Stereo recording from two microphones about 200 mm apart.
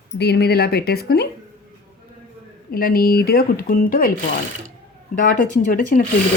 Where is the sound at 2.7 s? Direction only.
45° left (ahead or behind).